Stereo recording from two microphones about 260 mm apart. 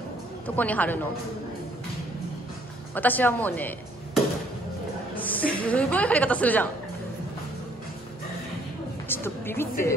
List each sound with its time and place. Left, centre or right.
0.6 s a woman's voice: centre
2.9 s speech: centre
9.1 s a woman's voice: centre